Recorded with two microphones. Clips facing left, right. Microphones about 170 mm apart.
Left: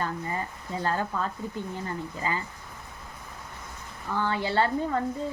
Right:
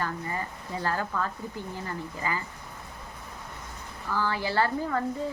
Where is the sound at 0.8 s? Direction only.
25° left (ahead or behind).